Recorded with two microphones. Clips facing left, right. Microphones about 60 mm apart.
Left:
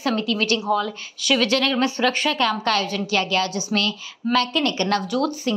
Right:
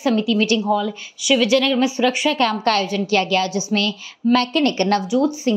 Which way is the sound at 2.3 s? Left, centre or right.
Right.